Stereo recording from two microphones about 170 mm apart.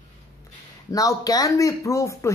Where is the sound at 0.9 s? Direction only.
20° left (ahead or behind).